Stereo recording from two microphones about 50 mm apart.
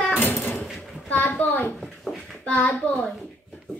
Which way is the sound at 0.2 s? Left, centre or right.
Left.